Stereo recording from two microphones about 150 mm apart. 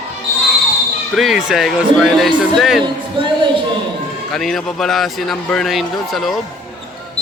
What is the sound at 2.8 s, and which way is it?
Speech, 30° right (ahead or behind).